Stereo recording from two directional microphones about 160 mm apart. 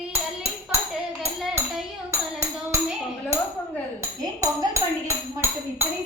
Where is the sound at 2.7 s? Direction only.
15° right (ahead or behind).